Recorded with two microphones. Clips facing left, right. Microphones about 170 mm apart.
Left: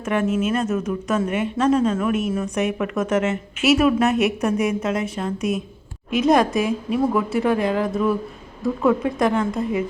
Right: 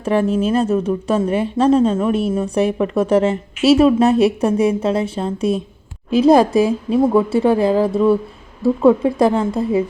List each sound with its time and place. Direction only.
0.0 s a woman's voice: 30° right (ahead or behind)